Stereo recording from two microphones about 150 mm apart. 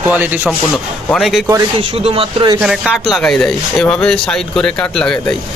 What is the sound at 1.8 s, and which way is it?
Speech, 40° right (ahead or behind).